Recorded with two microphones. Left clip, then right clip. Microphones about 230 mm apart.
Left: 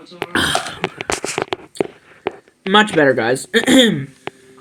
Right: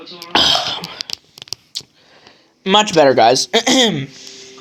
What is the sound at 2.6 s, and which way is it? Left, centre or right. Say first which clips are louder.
Speech: right 1 dB; right.